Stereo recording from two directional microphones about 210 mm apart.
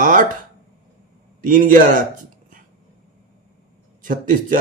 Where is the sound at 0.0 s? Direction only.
40° right (ahead or behind).